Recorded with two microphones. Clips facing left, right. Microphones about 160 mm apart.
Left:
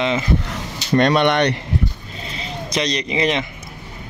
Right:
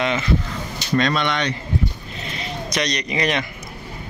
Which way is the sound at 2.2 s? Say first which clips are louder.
Even; 30° left (ahead or behind).